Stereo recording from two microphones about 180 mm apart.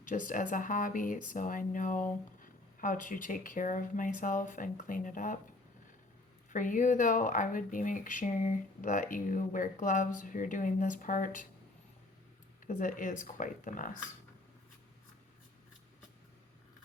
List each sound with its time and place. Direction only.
0.0 s speech: 45° left (ahead or behind)
6.5 s speech: 45° left (ahead or behind)
12.6 s speech: 45° left (ahead or behind)